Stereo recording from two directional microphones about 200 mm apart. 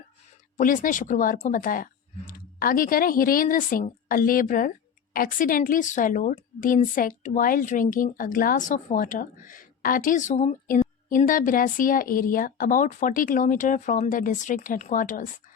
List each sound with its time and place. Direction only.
0.5 s a woman's voice: 40° left (ahead or behind)